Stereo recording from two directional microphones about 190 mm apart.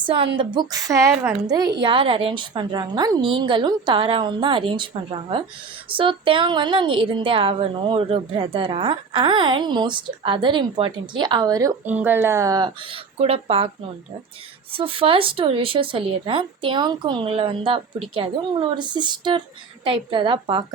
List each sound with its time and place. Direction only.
0.0 s a woman's voice: 25° right (ahead or behind)
11.9 s a woman's voice: 10° right (ahead or behind); by 13.7 s 30° right (ahead or behind)
14.7 s a woman's voice: 30° right (ahead or behind)